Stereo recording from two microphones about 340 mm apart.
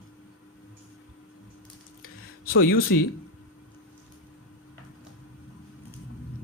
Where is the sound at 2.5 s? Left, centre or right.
Left.